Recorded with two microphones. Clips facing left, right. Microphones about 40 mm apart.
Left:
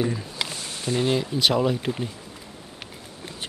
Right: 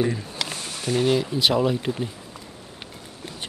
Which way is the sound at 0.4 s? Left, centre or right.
Centre.